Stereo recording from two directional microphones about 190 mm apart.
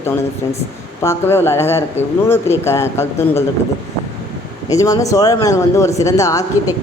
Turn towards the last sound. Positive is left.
turn(degrees=15)  # may be behind; listen again after turning